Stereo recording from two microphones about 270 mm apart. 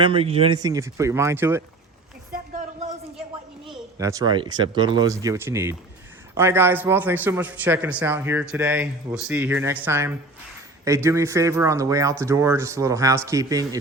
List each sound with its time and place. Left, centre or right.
0.0 s speech: right
2.3 s a sound: right
3.9 s speech: centre